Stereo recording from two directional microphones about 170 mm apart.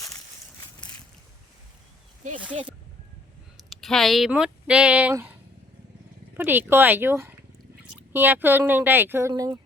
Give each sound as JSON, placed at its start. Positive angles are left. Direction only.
{"t": 2.2, "sound": "speech", "side_deg": -45}
{"t": 3.7, "sound": "speech", "side_deg": 0}